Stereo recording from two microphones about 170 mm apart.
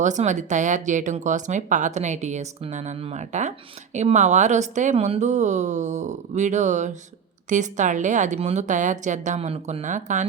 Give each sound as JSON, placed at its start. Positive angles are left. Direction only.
{"t": 0.0, "sound": "speech", "side_deg": -45}